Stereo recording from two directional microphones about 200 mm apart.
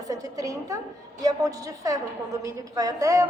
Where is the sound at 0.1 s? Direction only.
15° right (ahead or behind).